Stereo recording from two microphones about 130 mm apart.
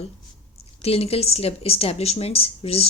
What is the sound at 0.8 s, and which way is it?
A woman's voice, 50° left (ahead or behind).